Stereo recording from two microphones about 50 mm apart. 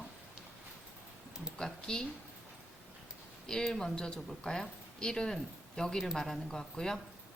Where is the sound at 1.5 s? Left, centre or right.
Centre.